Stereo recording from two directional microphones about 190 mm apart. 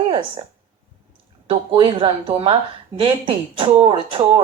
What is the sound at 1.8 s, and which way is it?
Speech, 25° right (ahead or behind).